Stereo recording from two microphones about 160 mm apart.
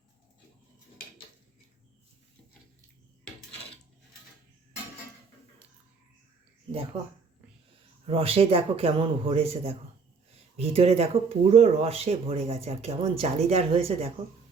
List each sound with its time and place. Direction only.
8.0 s speech: 35° right (ahead or behind)